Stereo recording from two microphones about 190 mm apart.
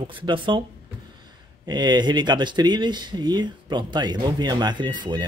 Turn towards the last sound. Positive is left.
turn(degrees=-25)  # may be behind; listen again after turning